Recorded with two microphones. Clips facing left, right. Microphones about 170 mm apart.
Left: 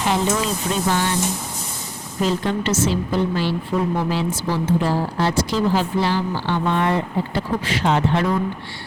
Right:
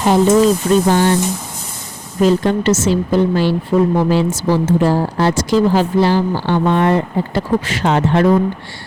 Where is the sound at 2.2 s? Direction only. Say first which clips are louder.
Right 8 dB; 50° right (ahead or behind).